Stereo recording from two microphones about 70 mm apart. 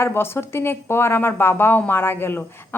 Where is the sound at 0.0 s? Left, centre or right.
Left.